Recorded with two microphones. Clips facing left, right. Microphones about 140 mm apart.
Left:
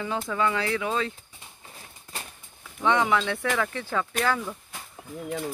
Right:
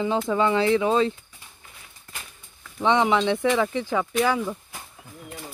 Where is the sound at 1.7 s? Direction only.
35° left (ahead or behind).